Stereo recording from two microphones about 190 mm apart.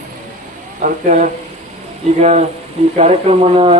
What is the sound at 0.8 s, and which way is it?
Speech, 40° right (ahead or behind).